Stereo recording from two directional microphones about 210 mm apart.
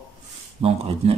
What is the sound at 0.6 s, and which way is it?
Speech, 25° right (ahead or behind).